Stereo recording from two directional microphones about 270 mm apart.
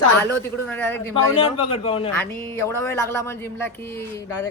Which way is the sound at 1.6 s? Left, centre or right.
Centre.